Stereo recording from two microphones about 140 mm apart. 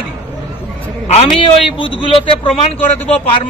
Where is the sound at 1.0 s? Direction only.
50° left (ahead or behind).